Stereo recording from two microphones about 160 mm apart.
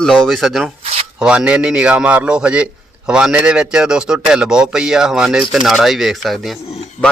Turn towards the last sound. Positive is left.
turn(degrees=0)  # may be behind; listen again after turning